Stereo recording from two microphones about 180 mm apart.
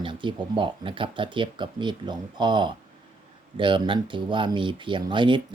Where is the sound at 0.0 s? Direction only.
25° right (ahead or behind).